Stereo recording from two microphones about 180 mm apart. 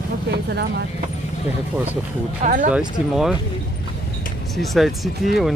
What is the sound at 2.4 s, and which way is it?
Speech, 45° right (ahead or behind).